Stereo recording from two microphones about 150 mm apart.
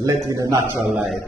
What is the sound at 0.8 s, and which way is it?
Mantra, 10° right (ahead or behind).